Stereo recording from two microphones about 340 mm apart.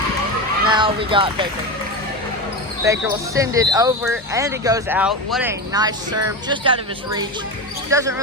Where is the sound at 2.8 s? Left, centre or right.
Centre.